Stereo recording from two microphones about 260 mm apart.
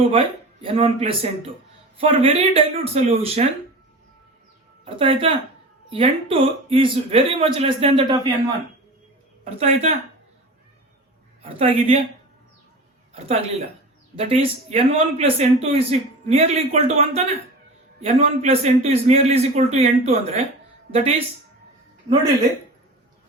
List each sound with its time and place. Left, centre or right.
0.6 s a man's voice: right
4.9 s a man's voice: centre
9.4 s a man's voice: right
11.4 s a man's voice: right
13.1 s a man's voice: right